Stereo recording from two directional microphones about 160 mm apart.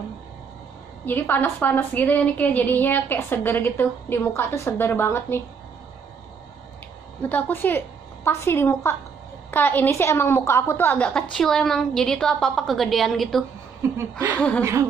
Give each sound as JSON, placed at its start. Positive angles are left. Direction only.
{"t": 1.0, "sound": "a woman's voice", "side_deg": 10}
{"t": 7.2, "sound": "a woman's voice", "side_deg": 10}
{"t": 14.6, "sound": "music", "side_deg": -20}